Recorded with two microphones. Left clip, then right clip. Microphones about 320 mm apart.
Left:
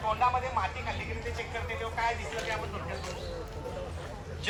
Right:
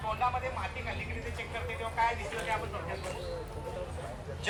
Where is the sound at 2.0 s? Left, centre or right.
Centre.